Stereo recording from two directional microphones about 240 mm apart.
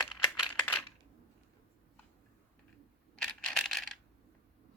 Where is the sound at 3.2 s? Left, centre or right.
Centre.